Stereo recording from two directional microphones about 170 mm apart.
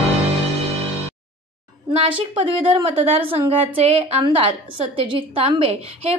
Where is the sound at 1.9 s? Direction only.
30° right (ahead or behind).